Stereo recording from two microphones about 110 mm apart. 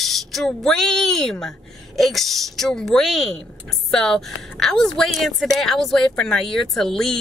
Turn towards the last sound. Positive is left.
turn(degrees=5)  # may be behind; listen again after turning